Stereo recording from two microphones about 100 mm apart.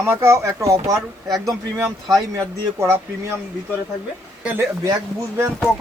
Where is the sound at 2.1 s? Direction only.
35° right (ahead or behind).